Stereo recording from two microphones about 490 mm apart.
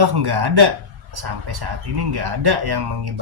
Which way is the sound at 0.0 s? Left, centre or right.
Right.